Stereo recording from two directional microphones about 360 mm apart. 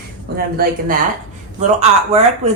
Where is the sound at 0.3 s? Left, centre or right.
Right.